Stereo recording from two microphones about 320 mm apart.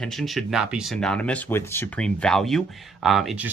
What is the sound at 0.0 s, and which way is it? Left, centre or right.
Speech, centre.